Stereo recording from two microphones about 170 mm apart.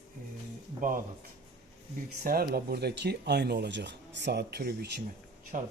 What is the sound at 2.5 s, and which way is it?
Speech, 70° right (ahead or behind).